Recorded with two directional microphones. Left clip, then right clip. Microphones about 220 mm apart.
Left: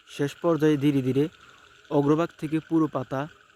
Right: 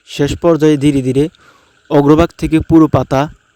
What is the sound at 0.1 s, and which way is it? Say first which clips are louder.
Speech: right 13 dB; 35° right (ahead or behind).